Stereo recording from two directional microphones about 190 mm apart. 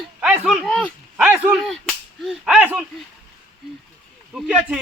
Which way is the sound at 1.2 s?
10° right (ahead or behind).